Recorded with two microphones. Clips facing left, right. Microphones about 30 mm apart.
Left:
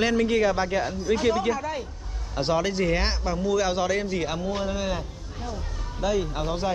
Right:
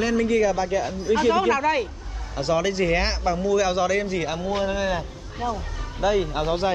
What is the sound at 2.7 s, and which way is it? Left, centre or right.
Speech, centre.